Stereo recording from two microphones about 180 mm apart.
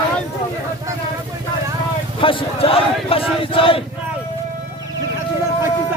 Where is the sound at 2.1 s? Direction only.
30° left (ahead or behind).